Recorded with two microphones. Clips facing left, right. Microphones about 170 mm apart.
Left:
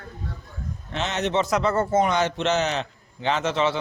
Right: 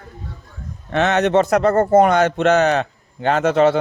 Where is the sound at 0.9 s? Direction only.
60° right (ahead or behind).